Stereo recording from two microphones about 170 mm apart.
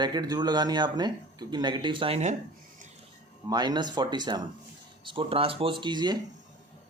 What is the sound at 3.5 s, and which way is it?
Speech, 25° right (ahead or behind).